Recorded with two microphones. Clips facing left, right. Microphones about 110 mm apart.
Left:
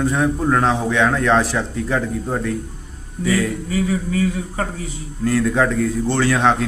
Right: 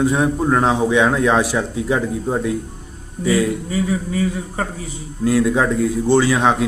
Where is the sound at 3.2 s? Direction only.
25° right (ahead or behind).